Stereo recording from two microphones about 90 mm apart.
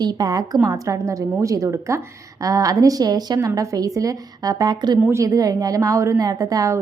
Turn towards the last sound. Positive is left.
turn(degrees=-40)  # may be behind; listen again after turning